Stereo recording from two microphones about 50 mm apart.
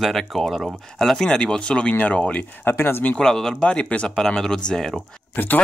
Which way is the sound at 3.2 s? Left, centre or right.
Centre.